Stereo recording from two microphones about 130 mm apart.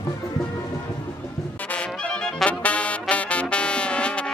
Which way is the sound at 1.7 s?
5° left (ahead or behind).